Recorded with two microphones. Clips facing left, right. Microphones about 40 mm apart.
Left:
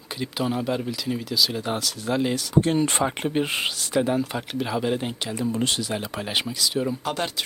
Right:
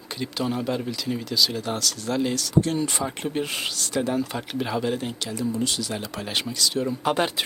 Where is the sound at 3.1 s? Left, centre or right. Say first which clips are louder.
Left 3 dB; left.